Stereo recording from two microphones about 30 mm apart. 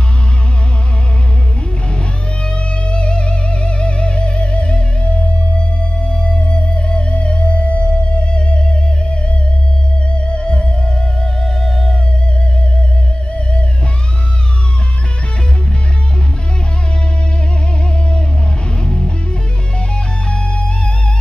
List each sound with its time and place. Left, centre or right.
1.9 s music: left
10.7 s music: centre
11.6 s music: centre
18.7 s music: left